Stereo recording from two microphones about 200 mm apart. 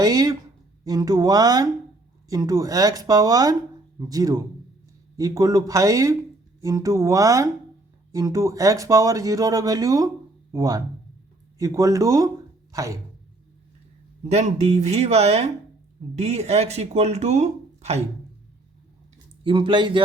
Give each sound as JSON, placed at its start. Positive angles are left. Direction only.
{"t": 0.0, "sound": "speech", "side_deg": -20}
{"t": 14.3, "sound": "speech", "side_deg": -35}
{"t": 19.5, "sound": "speech", "side_deg": -25}